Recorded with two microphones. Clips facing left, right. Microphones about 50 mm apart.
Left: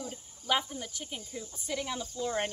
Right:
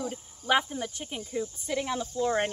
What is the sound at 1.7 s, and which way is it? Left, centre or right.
Speech, centre.